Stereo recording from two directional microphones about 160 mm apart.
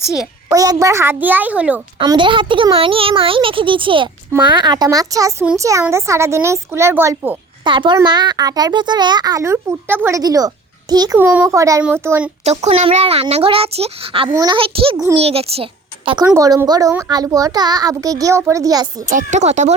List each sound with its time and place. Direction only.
0.0 s a child's voice: centre (ahead or behind)
0.5 s a child's voice: 20° right (ahead or behind)
2.0 s a child's voice: 30° right (ahead or behind)
7.6 s a child's voice: 30° right (ahead or behind)
12.5 s a child's voice: 40° right (ahead or behind)
16.2 s a child's voice: 20° right (ahead or behind)
19.1 s speech: 45° right (ahead or behind)